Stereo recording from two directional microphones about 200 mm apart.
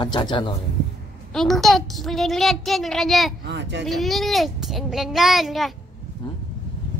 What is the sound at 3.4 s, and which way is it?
Speech, 60° right (ahead or behind).